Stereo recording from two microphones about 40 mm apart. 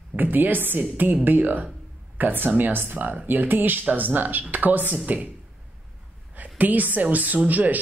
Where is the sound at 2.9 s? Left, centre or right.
Right.